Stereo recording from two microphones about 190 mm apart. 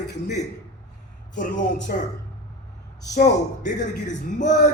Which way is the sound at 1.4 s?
40° left (ahead or behind).